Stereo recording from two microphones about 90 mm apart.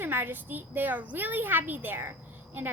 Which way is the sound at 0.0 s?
20° right (ahead or behind).